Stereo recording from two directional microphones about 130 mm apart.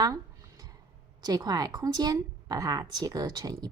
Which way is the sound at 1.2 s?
30° right (ahead or behind).